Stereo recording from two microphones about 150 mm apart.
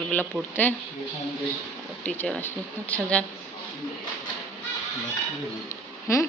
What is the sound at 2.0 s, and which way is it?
Speech, 10° left (ahead or behind).